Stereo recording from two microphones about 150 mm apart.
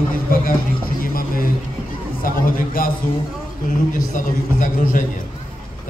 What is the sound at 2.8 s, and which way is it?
Speech, 75° left (ahead or behind).